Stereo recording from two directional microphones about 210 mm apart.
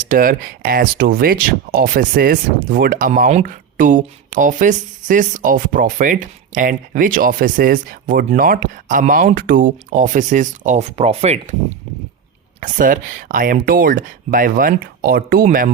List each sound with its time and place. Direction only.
0.1 s speech: 40° right (ahead or behind)
12.5 s speech: 35° right (ahead or behind)